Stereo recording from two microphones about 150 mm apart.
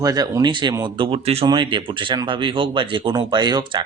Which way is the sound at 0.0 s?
25° right (ahead or behind).